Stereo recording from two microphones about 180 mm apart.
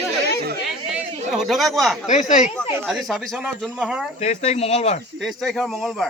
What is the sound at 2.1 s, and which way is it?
Speech, 45° left (ahead or behind).